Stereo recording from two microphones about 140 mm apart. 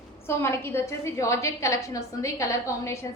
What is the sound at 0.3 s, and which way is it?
A woman's voice, 20° left (ahead or behind).